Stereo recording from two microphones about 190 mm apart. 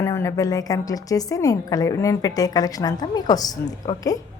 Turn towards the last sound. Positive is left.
turn(degrees=20)  # may be behind; listen again after turning